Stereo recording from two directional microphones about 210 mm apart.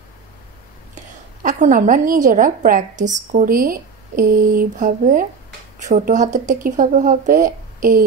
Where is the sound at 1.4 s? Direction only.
40° right (ahead or behind).